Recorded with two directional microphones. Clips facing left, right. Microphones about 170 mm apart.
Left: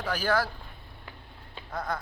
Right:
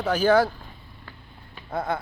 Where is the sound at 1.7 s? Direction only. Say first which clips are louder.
Right 6 dB; 25° right (ahead or behind).